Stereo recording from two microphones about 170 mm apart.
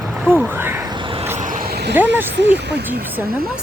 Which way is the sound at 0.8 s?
30° right (ahead or behind).